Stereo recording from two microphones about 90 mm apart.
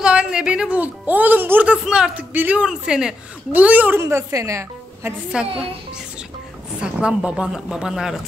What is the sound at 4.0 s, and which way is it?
A woman's voice, 30° right (ahead or behind).